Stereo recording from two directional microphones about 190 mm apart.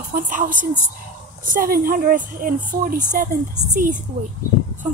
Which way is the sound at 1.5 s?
50° right (ahead or behind).